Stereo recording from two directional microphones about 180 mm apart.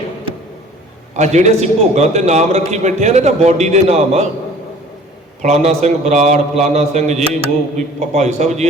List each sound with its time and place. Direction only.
1.1 s a man's voice: 40° right (ahead or behind)
5.4 s a man's voice: 40° right (ahead or behind)